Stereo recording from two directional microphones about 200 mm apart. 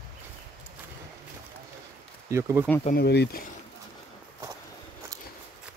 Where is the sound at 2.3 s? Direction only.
15° right (ahead or behind).